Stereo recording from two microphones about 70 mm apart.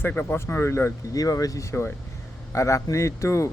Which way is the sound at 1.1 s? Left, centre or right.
Left.